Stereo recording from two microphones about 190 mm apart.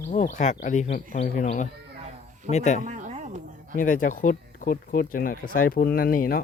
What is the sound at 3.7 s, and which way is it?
Speech, 45° left (ahead or behind).